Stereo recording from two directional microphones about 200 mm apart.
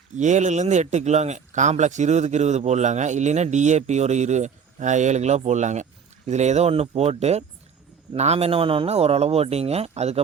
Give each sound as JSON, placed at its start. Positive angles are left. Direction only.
{"t": 0.2, "sound": "speech", "side_deg": -35}